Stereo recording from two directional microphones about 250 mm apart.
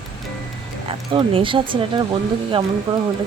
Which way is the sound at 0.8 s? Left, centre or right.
Right.